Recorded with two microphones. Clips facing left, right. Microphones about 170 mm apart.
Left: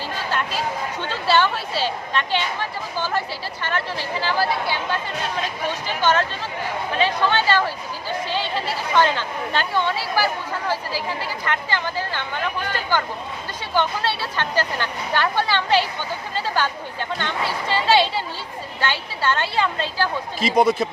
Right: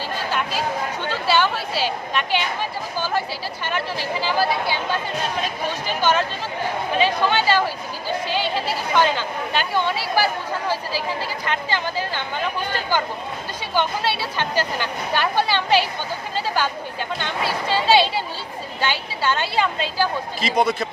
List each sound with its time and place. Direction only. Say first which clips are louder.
1.3 s speech: left 1 dB; 5° right (ahead or behind)
6.0 s speech: even; 10° right (ahead or behind)
9.5 s speech: even; 10° right (ahead or behind)
11.4 s speech: even; 15° right (ahead or behind)
13.7 s speech: even; 10° right (ahead or behind)
20.4 s speech: left 3 dB; 10° left (ahead or behind)